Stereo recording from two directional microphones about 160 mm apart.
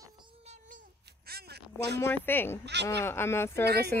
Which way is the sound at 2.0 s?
10° left (ahead or behind).